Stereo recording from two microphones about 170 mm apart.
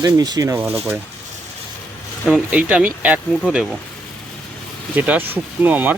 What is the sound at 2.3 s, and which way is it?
Speech, 5° right (ahead or behind).